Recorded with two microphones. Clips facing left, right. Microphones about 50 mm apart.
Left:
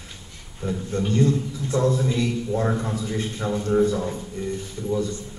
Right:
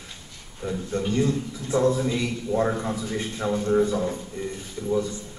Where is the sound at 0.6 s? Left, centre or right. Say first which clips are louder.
Left 1 dB; centre.